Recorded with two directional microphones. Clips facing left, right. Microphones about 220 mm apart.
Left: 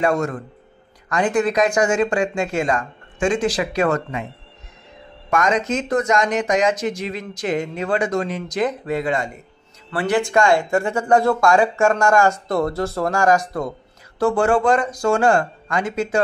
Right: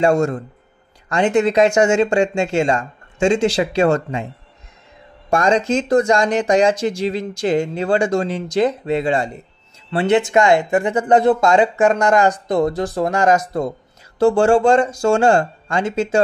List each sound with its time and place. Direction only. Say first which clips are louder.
0.0 s speech: right 4 dB; 25° right (ahead or behind)
5.3 s speech: right 3 dB; 30° right (ahead or behind)